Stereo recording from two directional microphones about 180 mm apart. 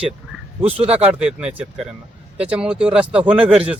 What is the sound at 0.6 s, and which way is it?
Speech, 30° right (ahead or behind).